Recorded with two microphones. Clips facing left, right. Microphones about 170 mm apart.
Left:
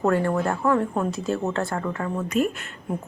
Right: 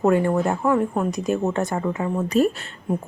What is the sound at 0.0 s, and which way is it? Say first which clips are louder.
Speech: right 3 dB; 15° right (ahead or behind).